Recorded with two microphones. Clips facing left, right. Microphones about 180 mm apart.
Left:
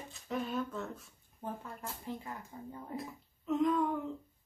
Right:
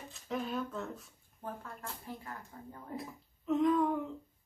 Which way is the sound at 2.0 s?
20° left (ahead or behind).